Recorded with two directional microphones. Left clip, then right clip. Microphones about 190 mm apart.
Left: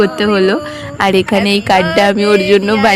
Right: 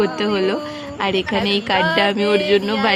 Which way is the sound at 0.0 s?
30° left (ahead or behind).